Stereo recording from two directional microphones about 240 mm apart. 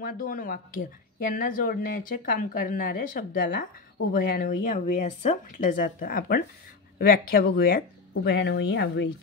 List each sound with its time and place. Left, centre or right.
0.0 s speech: left